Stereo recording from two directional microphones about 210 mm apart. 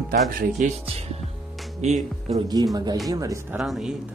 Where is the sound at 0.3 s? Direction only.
40° right (ahead or behind).